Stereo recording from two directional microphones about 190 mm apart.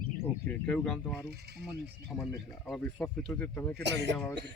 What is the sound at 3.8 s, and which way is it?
Speech, 65° right (ahead or behind).